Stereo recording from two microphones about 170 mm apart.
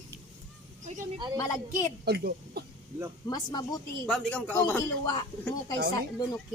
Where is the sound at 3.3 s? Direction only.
25° left (ahead or behind).